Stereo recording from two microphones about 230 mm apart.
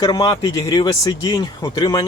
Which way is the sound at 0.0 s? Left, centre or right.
Centre.